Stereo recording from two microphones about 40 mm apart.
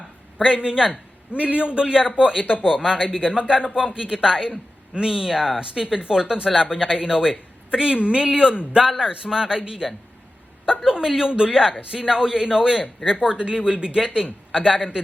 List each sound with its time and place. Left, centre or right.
0.4 s a man's voice: right